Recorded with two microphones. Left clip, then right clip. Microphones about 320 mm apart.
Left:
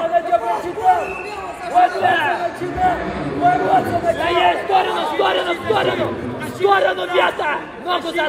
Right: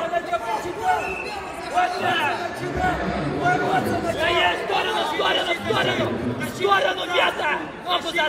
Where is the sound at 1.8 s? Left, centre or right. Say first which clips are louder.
Left 7 dB; left.